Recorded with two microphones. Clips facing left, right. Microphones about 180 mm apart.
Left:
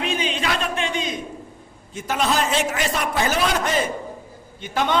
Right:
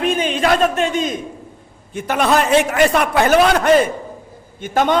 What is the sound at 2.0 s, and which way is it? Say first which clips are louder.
A man's voice: right 6 dB; 60° right (ahead or behind).